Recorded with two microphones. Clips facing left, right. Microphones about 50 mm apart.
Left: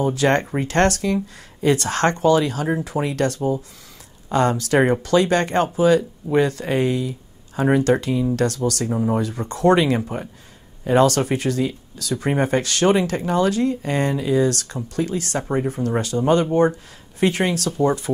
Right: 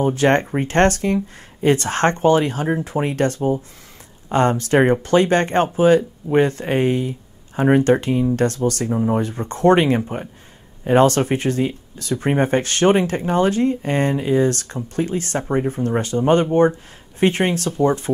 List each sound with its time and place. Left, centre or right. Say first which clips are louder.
0.0 s speech: right 2 dB; right